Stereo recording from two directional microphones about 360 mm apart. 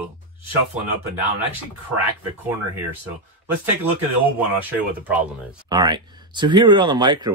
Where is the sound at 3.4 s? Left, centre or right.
Centre.